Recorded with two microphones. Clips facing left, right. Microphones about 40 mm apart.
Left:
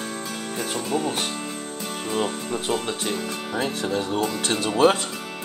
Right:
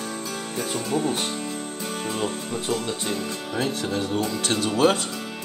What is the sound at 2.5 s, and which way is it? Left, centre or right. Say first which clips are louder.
Speech: left 1 dB; left.